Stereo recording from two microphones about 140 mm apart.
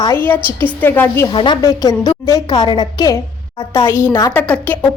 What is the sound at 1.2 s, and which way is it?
A woman's voice, 35° left (ahead or behind).